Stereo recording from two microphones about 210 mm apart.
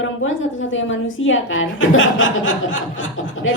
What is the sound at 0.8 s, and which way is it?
Speech, 65° left (ahead or behind).